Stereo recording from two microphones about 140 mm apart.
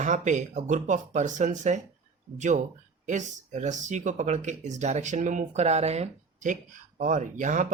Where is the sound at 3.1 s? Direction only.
60° right (ahead or behind).